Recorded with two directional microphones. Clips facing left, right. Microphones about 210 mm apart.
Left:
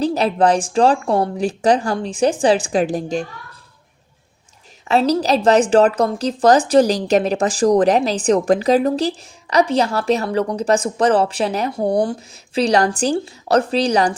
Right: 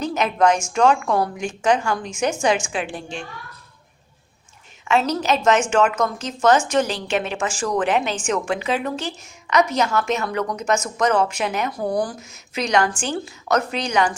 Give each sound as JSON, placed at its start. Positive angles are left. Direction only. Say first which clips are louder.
{"t": 0.0, "sound": "a woman's voice", "louder": "left 3 dB", "side_deg": 35}
{"t": 4.9, "sound": "a woman's voice", "louder": "left 4 dB", "side_deg": 35}